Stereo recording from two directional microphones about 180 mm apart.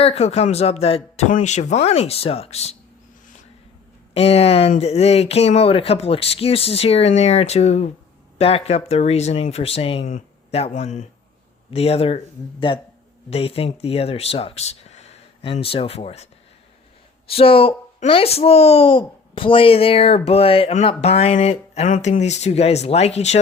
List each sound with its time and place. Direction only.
0.0 s a child's voice: 35° left (ahead or behind)
4.1 s a child's voice: 35° left (ahead or behind)